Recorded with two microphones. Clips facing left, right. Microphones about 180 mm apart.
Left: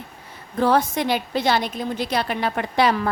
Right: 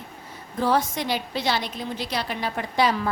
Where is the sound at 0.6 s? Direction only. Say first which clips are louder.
Left 4 dB; 60° left (ahead or behind).